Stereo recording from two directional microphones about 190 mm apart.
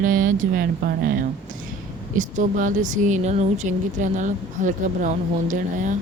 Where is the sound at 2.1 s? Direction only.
45° right (ahead or behind).